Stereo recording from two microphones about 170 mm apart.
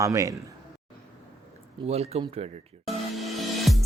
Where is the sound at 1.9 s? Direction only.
35° right (ahead or behind).